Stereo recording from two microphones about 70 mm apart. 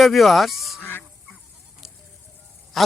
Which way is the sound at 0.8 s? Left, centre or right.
Left.